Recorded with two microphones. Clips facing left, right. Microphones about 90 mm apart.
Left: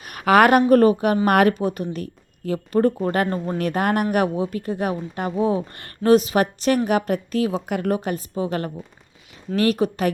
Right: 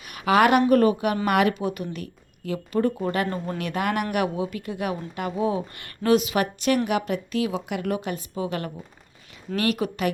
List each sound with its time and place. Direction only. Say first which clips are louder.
0.0 s a woman's voice: left 4 dB; 50° left (ahead or behind)